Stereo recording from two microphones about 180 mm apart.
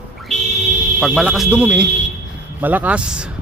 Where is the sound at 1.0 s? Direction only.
Centre (ahead or behind).